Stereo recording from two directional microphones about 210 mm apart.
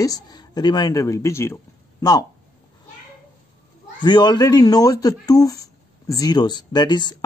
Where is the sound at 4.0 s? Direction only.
20° left (ahead or behind).